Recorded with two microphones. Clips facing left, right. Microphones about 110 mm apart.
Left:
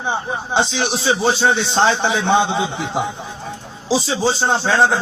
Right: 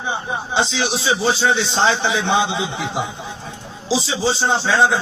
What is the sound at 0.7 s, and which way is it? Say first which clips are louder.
A man's voice: left 1 dB; 50° left (ahead or behind).